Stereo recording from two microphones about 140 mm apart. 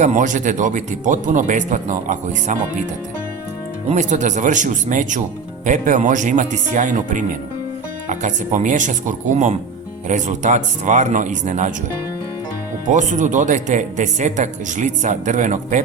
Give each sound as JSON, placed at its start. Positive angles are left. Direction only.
{"t": 0.0, "sound": "speech", "side_deg": -60}
{"t": 3.8, "sound": "speech", "side_deg": -60}
{"t": 12.9, "sound": "speech", "side_deg": -60}